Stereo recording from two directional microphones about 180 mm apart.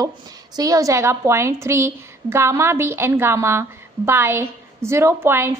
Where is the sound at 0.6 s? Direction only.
20° right (ahead or behind).